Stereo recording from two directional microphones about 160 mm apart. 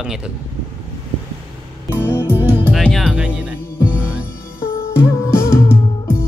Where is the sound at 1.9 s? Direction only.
15° left (ahead or behind).